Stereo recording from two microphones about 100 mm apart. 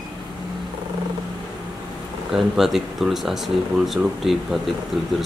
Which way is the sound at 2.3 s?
5° right (ahead or behind).